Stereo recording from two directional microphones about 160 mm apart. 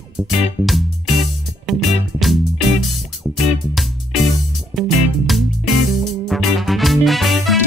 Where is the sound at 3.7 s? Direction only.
Centre (ahead or behind).